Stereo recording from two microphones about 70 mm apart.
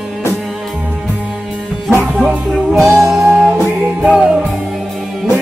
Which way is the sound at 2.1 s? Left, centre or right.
Centre.